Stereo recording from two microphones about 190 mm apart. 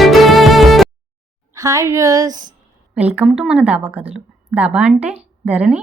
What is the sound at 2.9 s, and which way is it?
A woman's voice, 5° right (ahead or behind).